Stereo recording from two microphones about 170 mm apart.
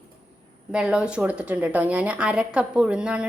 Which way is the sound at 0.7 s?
5° right (ahead or behind).